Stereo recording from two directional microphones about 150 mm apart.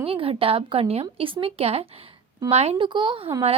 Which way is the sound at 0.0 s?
40° right (ahead or behind).